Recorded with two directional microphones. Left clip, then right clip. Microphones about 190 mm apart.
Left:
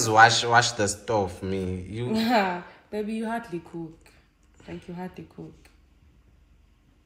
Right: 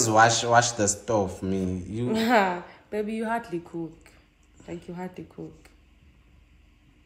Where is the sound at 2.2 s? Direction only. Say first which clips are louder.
Right 2 dB; 5° right (ahead or behind).